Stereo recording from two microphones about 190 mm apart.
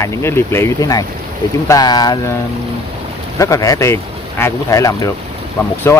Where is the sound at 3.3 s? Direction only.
15° left (ahead or behind).